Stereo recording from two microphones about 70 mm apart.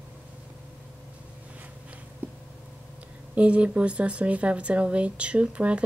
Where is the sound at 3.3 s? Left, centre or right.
Centre.